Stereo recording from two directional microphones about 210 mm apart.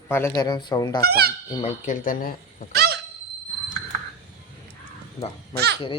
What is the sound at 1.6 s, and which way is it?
Speech, 35° left (ahead or behind).